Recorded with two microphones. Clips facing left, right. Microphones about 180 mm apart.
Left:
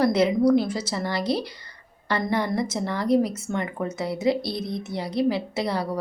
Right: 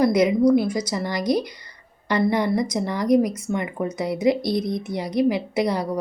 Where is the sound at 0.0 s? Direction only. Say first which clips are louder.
Right 2 dB; 10° right (ahead or behind).